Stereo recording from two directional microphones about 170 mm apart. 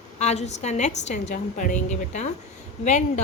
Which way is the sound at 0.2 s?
40° left (ahead or behind).